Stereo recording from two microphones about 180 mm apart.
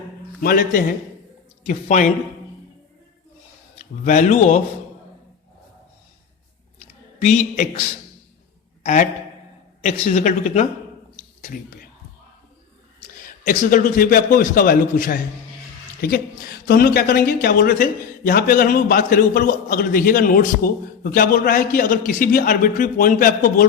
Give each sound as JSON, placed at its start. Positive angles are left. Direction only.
{"t": 0.4, "sound": "speech", "side_deg": 55}
{"t": 3.8, "sound": "speech", "side_deg": 45}
{"t": 7.2, "sound": "a woman's voice", "side_deg": 40}
{"t": 8.8, "sound": "a man's voice", "side_deg": 45}
{"t": 13.2, "sound": "speech", "side_deg": 50}